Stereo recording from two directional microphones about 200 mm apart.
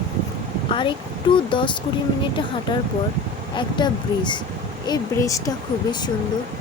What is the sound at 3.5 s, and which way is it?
Speech, 20° left (ahead or behind).